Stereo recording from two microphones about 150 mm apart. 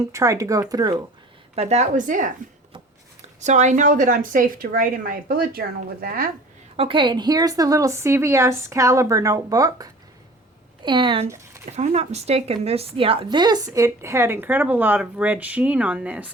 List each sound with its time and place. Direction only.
0.0 s speech: 20° right (ahead or behind)
1.5 s speech: 50° right (ahead or behind); by 6.3 s 75° right (ahead or behind)
6.7 s speech: 35° right (ahead or behind)
11.6 s speech: 50° right (ahead or behind); by 16.3 s 10° right (ahead or behind)